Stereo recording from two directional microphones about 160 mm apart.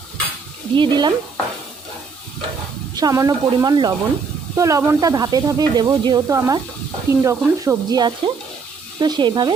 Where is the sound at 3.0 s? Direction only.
20° right (ahead or behind).